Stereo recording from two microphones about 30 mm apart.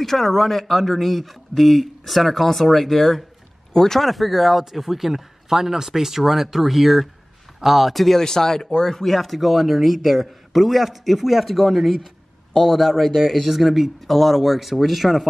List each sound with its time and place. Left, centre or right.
0.0 s speech: centre
3.7 s speech: centre
4.0 s speech: centre
8.2 s speech: centre